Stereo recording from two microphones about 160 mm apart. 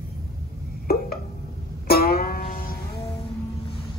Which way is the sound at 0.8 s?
65° left (ahead or behind).